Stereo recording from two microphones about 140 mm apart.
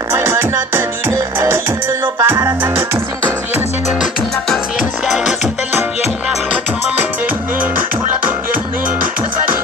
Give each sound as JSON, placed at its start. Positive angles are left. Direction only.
{"t": 0.1, "sound": "music", "side_deg": -15}
{"t": 5.0, "sound": "music", "side_deg": 0}